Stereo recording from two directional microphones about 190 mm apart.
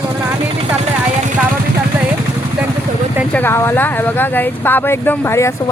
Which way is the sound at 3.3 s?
10° left (ahead or behind).